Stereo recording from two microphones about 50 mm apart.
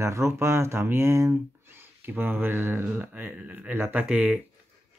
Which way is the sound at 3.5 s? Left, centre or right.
Right.